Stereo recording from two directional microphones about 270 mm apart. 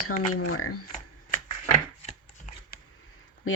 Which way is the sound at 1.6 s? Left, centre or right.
Left.